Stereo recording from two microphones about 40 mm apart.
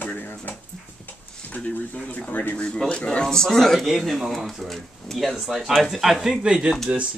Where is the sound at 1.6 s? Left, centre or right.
Left.